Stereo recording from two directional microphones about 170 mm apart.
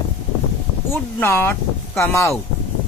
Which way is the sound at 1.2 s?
15° left (ahead or behind).